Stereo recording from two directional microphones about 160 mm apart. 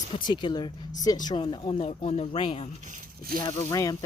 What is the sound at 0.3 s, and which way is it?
Speech, 25° left (ahead or behind).